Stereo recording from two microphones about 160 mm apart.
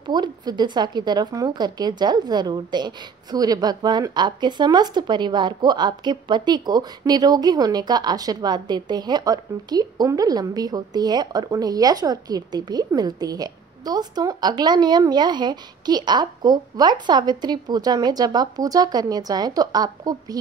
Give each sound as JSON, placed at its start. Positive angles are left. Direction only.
{"t": 0.0, "sound": "a woman's voice", "side_deg": -25}